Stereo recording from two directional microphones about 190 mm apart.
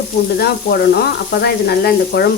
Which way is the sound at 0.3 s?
55° left (ahead or behind).